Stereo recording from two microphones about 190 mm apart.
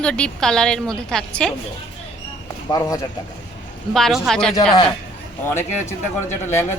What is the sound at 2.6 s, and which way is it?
Speech, 20° left (ahead or behind).